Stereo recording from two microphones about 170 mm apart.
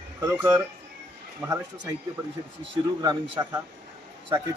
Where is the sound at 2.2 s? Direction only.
25° right (ahead or behind).